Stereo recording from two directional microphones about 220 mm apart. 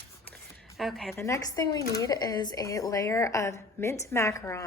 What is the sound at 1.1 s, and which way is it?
A woman's voice, 10° left (ahead or behind).